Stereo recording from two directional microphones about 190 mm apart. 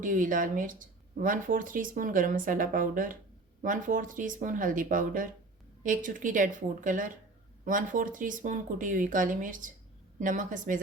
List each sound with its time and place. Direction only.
0.0 s speech: 45° right (ahead or behind)